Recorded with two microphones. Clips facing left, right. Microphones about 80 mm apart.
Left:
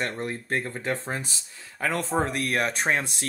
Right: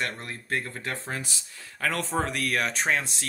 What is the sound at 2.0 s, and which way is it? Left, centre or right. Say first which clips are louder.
Speech: left 4 dB; left.